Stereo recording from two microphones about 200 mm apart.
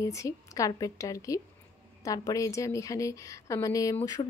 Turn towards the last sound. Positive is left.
turn(degrees=20)  # may be behind; listen again after turning